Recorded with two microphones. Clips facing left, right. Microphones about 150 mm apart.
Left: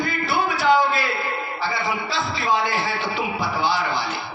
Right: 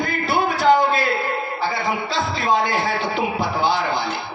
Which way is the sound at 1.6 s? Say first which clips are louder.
Right 1 dB; 50° right (ahead or behind).